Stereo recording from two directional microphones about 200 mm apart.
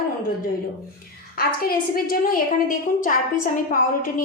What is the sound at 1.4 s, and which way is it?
A woman's voice, 45° left (ahead or behind).